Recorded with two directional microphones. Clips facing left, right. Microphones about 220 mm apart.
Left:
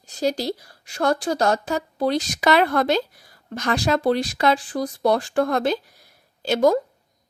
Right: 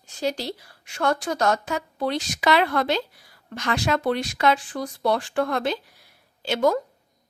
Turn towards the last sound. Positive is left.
turn(degrees=40)  # may be behind; listen again after turning